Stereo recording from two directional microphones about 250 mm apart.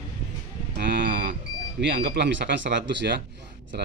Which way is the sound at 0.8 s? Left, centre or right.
Right.